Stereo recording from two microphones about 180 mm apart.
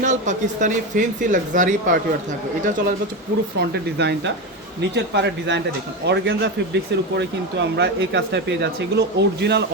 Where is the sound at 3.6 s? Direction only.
65° right (ahead or behind).